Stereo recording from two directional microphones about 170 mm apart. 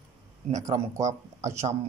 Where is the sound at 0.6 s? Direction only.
20° right (ahead or behind).